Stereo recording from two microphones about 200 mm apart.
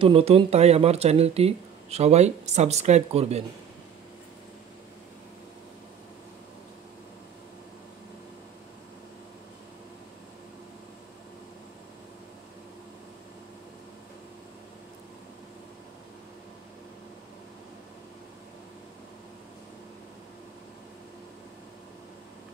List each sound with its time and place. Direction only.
0.0 s speech: 30° right (ahead or behind)